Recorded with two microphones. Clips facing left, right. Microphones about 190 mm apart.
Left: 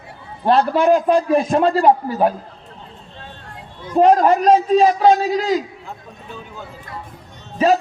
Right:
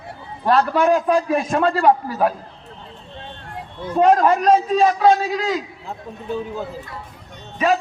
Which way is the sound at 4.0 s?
35° left (ahead or behind).